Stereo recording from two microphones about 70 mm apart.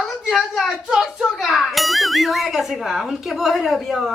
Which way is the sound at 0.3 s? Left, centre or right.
Centre.